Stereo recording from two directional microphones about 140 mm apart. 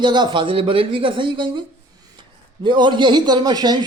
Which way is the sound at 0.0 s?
35° right (ahead or behind).